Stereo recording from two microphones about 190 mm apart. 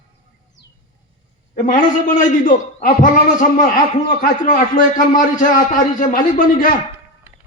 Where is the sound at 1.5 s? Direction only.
40° left (ahead or behind).